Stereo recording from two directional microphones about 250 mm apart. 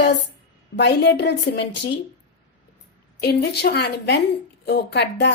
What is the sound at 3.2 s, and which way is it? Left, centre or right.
A woman's voice, left.